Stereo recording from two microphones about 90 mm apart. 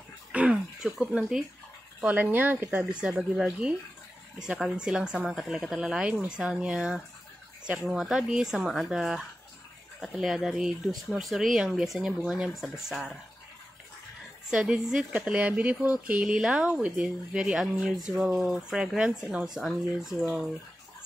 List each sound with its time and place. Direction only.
0.3 s throat clearing: 15° right (ahead or behind)
0.7 s speech: 5° right (ahead or behind)
2.0 s speech: 20° right (ahead or behind)
3.0 s speech: 10° right (ahead or behind)
14.5 s speech: 10° right (ahead or behind)
19.4 s speech: 5° right (ahead or behind)